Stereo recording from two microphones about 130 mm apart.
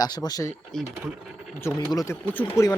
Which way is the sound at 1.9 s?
30° left (ahead or behind).